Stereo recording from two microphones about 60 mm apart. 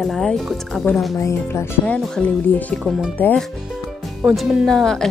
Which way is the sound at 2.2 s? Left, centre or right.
Left.